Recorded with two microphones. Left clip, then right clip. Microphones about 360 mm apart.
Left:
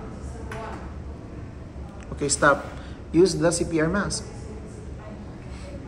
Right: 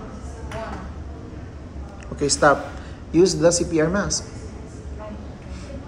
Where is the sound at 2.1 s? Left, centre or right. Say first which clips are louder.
Right 3 dB; centre.